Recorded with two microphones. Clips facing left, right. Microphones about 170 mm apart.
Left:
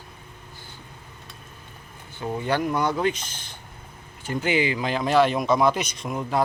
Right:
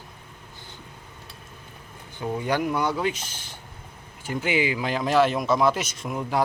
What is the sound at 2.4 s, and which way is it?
Speech, 10° right (ahead or behind).